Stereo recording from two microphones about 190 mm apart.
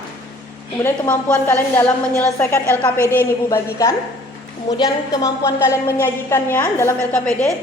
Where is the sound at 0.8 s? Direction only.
10° left (ahead or behind).